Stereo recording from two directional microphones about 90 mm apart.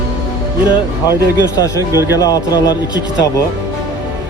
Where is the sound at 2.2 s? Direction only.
45° left (ahead or behind).